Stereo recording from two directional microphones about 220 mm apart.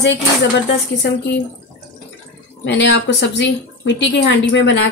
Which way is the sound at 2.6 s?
50° left (ahead or behind).